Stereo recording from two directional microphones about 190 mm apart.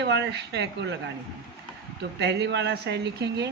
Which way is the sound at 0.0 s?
65° right (ahead or behind).